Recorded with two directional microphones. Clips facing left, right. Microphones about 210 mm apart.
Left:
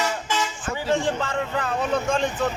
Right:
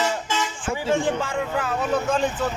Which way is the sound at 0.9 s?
10° right (ahead or behind).